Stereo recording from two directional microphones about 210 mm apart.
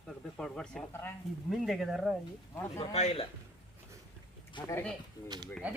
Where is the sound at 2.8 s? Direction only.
30° left (ahead or behind).